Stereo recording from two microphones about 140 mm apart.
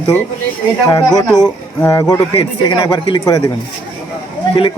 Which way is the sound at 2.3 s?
40° left (ahead or behind).